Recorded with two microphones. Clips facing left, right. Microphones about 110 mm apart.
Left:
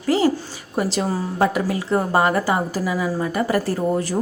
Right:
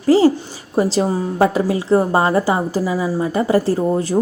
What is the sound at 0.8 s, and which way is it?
A woman's voice, 30° right (ahead or behind).